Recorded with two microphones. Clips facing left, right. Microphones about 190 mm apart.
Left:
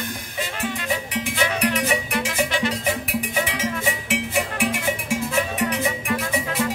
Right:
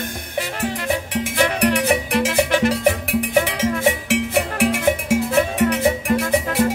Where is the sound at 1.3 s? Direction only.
60° right (ahead or behind).